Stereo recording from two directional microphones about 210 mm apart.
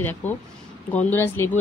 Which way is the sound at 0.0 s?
10° left (ahead or behind).